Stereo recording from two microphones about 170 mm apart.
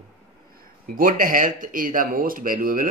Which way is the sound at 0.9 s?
55° right (ahead or behind).